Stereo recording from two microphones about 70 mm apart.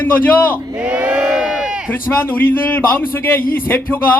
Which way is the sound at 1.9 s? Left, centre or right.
Left.